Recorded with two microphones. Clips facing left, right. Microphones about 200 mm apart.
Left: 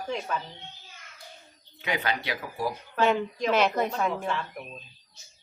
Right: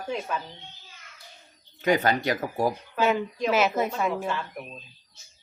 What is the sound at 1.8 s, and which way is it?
Speech, 45° right (ahead or behind).